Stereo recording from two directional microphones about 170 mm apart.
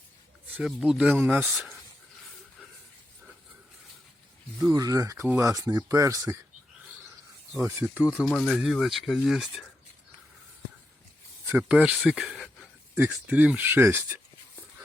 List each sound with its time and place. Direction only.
0.5 s speech: 5° right (ahead or behind)
4.6 s speech: 20° right (ahead or behind)
7.8 s speech: 10° right (ahead or behind)
11.4 s speech: 10° right (ahead or behind)
11.9 s a sound: centre (ahead or behind)
13.0 s speech: 10° right (ahead or behind)